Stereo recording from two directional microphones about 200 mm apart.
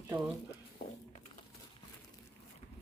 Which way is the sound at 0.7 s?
35° left (ahead or behind).